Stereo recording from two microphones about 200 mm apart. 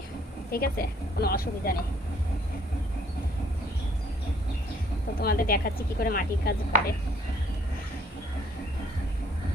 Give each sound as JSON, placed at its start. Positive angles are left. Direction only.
{"t": 0.5, "sound": "speech", "side_deg": 50}
{"t": 5.2, "sound": "speech", "side_deg": 50}